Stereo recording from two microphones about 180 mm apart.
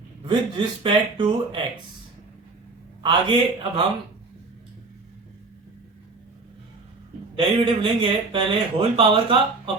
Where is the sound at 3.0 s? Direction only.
25° right (ahead or behind).